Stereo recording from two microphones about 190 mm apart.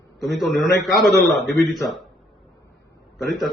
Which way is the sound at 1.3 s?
60° left (ahead or behind).